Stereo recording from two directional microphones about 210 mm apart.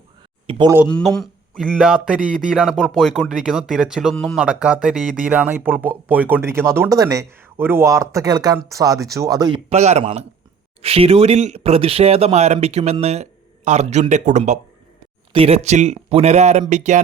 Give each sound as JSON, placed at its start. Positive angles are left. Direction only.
{"t": 0.5, "sound": "speech", "side_deg": -25}
{"t": 0.9, "sound": "speech", "side_deg": 5}
{"t": 9.6, "sound": "speech", "side_deg": -30}